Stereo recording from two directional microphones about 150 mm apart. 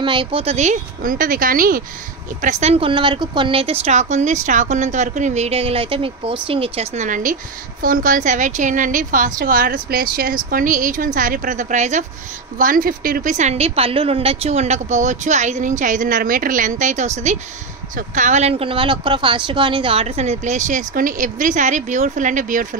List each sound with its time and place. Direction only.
0.0 s a woman's voice: 35° right (ahead or behind); by 1.8 s 70° right (ahead or behind)
2.4 s a woman's voice: 45° right (ahead or behind)
7.8 s a woman's voice: 65° right (ahead or behind)
12.5 s a woman's voice: 65° right (ahead or behind)